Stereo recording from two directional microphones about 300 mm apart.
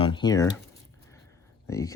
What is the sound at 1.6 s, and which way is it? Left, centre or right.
Speech, centre.